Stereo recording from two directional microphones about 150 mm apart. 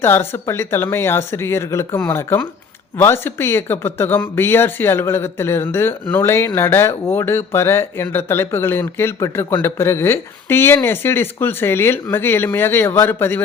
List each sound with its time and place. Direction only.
0.0 s speech: 15° left (ahead or behind)